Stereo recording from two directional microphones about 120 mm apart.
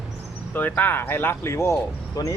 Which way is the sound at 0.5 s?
15° left (ahead or behind).